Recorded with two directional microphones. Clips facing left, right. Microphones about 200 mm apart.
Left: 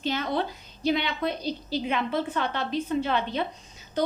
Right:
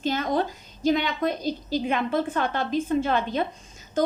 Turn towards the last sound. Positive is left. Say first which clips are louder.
# right 3 dB
turn(degrees=-45)  # may be behind; listen again after turning